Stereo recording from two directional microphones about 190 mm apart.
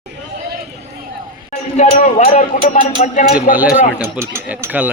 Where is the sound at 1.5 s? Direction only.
40° left (ahead or behind).